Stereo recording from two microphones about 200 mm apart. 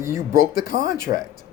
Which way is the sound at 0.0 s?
15° right (ahead or behind).